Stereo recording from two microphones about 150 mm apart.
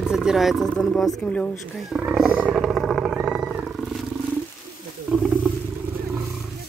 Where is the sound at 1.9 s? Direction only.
5° right (ahead or behind).